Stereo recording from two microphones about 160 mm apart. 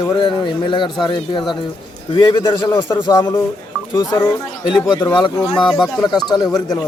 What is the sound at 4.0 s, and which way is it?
Speech, 20° left (ahead or behind).